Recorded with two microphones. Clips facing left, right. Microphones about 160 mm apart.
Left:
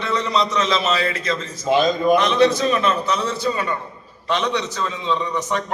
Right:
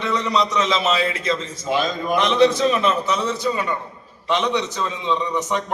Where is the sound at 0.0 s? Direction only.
15° right (ahead or behind).